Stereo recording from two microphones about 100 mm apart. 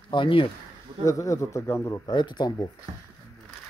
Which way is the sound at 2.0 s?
45° left (ahead or behind).